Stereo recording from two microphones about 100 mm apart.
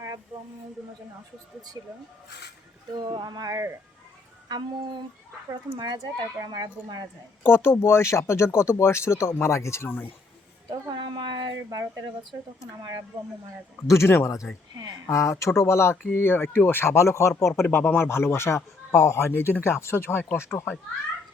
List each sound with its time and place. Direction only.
1.8 s speech: 40° right (ahead or behind)
7.4 s speech: 25° left (ahead or behind)
10.7 s speech: 45° right (ahead or behind)
13.8 s speech: 30° left (ahead or behind)